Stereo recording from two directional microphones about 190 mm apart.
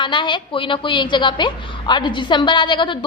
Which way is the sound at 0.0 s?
25° left (ahead or behind).